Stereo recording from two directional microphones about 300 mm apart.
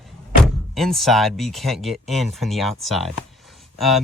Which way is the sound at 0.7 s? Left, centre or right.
Centre.